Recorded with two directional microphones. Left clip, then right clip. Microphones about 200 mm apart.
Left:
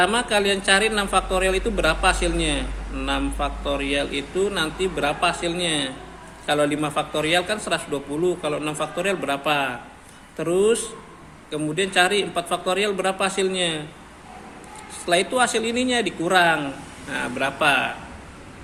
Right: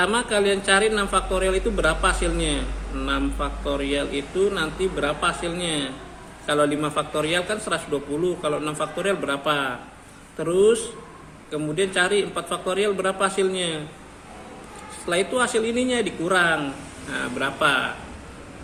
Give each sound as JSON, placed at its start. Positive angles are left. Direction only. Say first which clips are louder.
{"t": 0.0, "sound": "a man's voice", "louder": "left 1 dB", "side_deg": 15}
{"t": 15.0, "sound": "a man's voice", "louder": "left 3 dB", "side_deg": 15}